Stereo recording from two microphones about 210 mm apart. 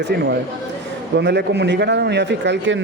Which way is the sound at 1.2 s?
55° right (ahead or behind).